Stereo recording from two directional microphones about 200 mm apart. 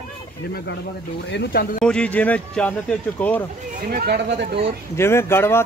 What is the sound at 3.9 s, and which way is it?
Speech, 50° right (ahead or behind).